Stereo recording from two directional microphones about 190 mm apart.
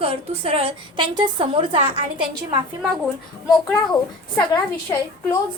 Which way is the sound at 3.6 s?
20° left (ahead or behind).